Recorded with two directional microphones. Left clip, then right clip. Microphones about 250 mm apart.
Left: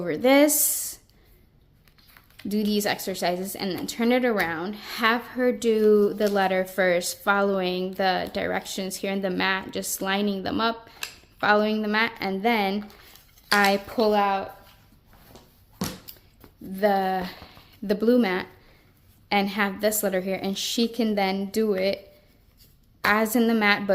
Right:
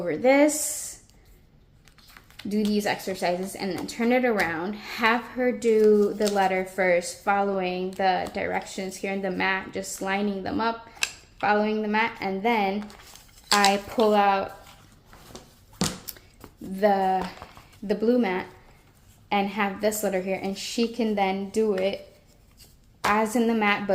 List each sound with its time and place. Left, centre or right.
0.0 s speech: left
2.1 s typing: centre
2.5 s speech: centre
14.0 s speech: centre
16.7 s speech: centre
20.5 s speech: left
20.9 s speech: left
23.5 s speech: left